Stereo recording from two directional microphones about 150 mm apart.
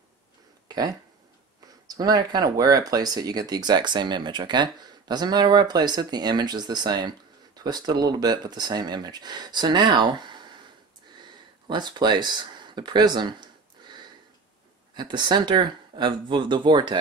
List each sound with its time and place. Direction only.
0.7 s a sound: 25° right (ahead or behind)
1.9 s speech: 25° right (ahead or behind)
11.6 s speech: 30° right (ahead or behind)